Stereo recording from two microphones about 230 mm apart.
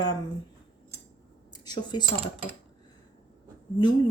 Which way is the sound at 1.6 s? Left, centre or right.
Centre.